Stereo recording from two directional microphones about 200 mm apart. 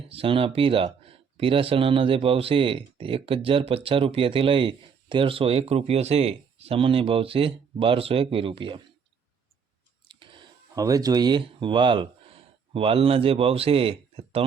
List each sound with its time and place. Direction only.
0.1 s speech: 30° right (ahead or behind)
10.1 s speech: 25° right (ahead or behind)